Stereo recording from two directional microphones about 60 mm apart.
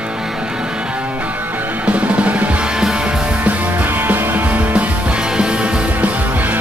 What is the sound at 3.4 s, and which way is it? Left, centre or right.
Music, right.